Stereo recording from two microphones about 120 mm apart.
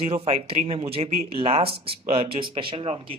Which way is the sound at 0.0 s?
50° right (ahead or behind).